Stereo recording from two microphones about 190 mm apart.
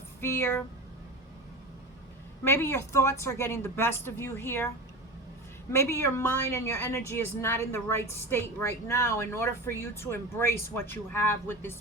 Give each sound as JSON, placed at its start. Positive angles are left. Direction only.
{"t": 0.2, "sound": "a woman's voice", "side_deg": 15}
{"t": 2.4, "sound": "a woman's voice", "side_deg": 15}
{"t": 5.7, "sound": "a woman's voice", "side_deg": 15}